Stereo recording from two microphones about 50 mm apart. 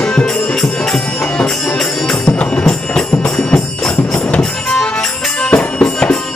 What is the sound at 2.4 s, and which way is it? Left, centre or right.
Music, left.